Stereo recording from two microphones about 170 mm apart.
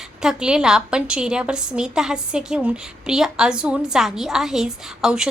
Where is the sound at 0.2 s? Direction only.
5° right (ahead or behind).